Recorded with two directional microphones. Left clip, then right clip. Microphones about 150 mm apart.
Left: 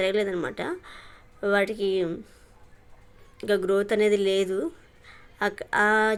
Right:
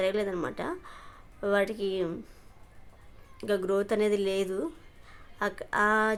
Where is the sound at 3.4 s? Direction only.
10° left (ahead or behind).